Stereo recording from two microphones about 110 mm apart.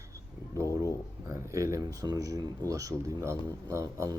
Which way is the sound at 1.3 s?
30° right (ahead or behind).